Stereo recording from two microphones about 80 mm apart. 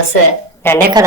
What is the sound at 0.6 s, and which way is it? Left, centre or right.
Speech, left.